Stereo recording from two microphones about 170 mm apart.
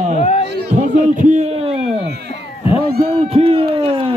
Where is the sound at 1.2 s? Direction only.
45° right (ahead or behind).